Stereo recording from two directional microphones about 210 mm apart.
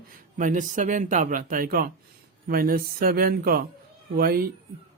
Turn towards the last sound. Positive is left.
turn(degrees=-45)  # may be behind; listen again after turning